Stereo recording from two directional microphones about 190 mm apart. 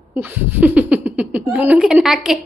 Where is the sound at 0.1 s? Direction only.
10° right (ahead or behind).